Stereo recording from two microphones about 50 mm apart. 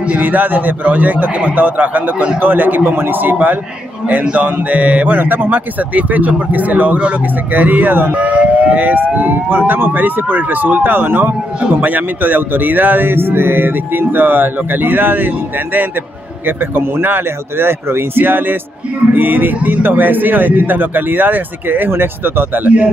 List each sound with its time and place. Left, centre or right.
0.0 s speech: right